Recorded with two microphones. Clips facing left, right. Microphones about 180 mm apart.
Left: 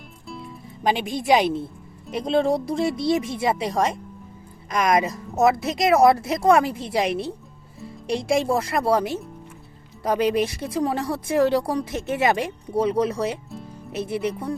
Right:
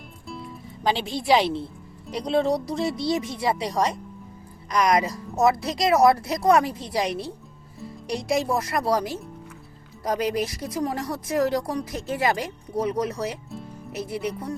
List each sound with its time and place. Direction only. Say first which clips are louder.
0.3 s music: even; centre (ahead or behind)
0.9 s speech: left 1 dB; 20° left (ahead or behind)